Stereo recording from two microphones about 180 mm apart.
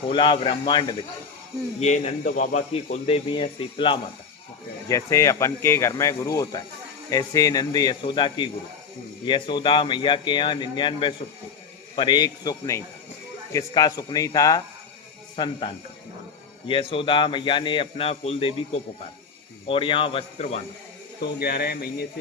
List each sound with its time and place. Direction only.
0.1 s speech: 30° left (ahead or behind)
1.8 s speech: 40° left (ahead or behind)
4.9 s speech: 15° left (ahead or behind)
16.6 s speech: 30° left (ahead or behind)
21.4 s a man's voice: 55° left (ahead or behind)